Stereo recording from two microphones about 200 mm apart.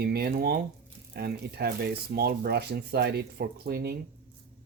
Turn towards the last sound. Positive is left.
turn(degrees=-50)  # may be behind; listen again after turning